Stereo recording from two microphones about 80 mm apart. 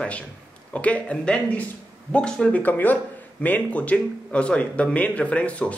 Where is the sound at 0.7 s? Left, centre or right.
Centre.